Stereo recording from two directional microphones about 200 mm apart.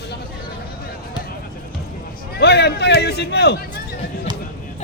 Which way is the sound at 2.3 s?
55° left (ahead or behind).